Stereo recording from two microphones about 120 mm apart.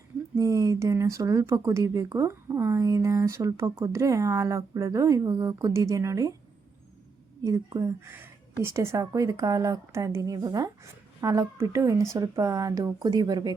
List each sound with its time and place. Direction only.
0.3 s speech: 30° right (ahead or behind)
7.4 s speech: 30° right (ahead or behind)